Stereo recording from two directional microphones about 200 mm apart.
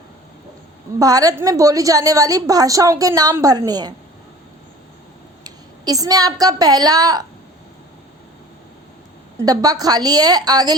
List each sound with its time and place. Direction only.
0.9 s a woman's voice: 20° right (ahead or behind)
5.4 s a sound: 20° right (ahead or behind)
6.4 s a woman's voice: 20° right (ahead or behind)
9.4 s a woman's voice: 20° right (ahead or behind)